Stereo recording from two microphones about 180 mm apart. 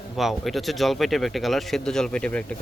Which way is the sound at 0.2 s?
Centre (ahead or behind).